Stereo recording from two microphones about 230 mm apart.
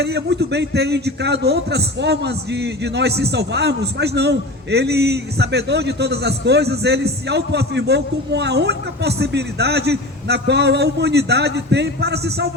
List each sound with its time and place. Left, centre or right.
0.0 s a man's voice: right